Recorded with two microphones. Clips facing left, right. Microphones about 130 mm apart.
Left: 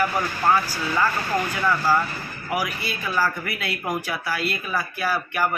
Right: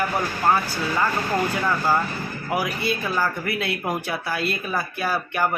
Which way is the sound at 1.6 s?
20° right (ahead or behind).